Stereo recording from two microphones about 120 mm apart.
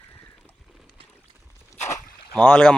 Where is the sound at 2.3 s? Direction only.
10° left (ahead or behind).